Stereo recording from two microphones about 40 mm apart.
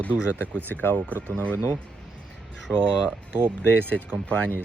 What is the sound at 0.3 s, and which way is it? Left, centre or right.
Speech, right.